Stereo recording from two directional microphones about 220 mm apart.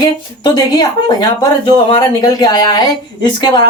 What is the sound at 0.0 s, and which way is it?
Speech, 20° left (ahead or behind).